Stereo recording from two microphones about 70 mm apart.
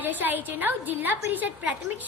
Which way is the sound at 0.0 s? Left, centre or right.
Right.